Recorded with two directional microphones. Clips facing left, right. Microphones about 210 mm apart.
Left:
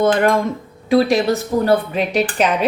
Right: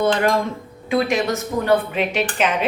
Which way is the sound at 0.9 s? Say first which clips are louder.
Left 5 dB; 35° left (ahead or behind).